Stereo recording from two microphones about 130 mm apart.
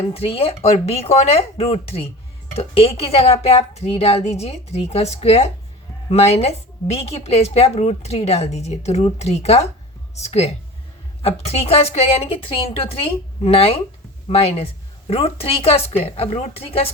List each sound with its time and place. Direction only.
0.1 s a woman's voice: 50° left (ahead or behind)